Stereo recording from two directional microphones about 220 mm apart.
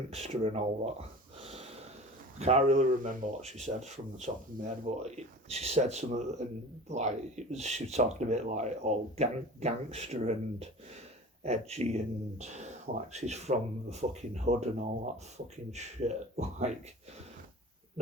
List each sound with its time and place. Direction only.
0.1 s speech: 30° right (ahead or behind)